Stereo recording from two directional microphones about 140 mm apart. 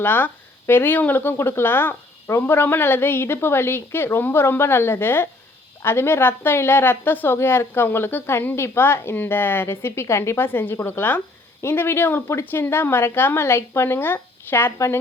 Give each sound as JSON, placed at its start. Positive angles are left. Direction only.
{"t": 0.0, "sound": "a woman's voice", "side_deg": 15}